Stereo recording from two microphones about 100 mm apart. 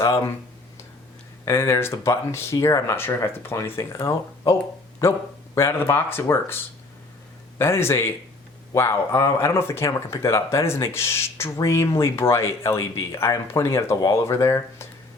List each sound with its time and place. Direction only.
0.0 s speech: 30° left (ahead or behind)
1.5 s speech: 25° left (ahead or behind)
2.9 s speech: 25° left (ahead or behind)
5.5 s speech: 25° left (ahead or behind)
7.6 s speech: 25° left (ahead or behind)